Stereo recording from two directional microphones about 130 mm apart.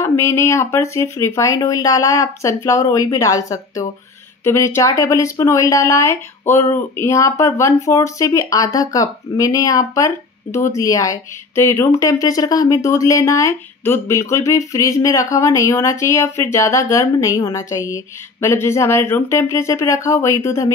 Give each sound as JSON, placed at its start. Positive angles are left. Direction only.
{"t": 0.0, "sound": "speech", "side_deg": 20}